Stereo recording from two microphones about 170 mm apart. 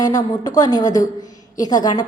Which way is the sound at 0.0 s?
20° left (ahead or behind).